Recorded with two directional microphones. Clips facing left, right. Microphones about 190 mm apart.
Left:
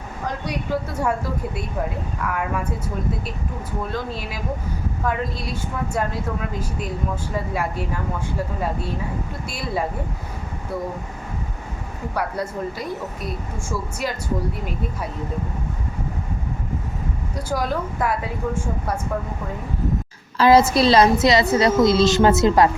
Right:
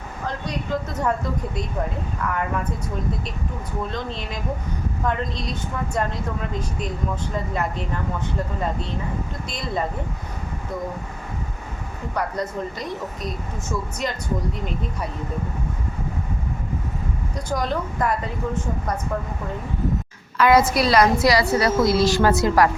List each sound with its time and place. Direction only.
0.3 s speech: 10° left (ahead or behind)
3.9 s a woman's voice: 5° left (ahead or behind)
12.1 s speech: 5° left (ahead or behind)
17.5 s a woman's voice: 5° left (ahead or behind)
20.4 s a woman's voice: 25° left (ahead or behind)